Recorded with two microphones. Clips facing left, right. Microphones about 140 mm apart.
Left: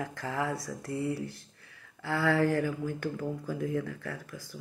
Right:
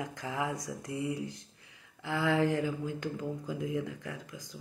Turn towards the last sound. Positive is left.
turn(degrees=-20)  # may be behind; listen again after turning